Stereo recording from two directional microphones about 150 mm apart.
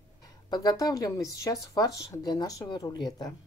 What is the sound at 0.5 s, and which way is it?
Speech, 25° left (ahead or behind).